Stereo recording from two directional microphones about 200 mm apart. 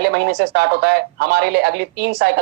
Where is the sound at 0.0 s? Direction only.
55° right (ahead or behind).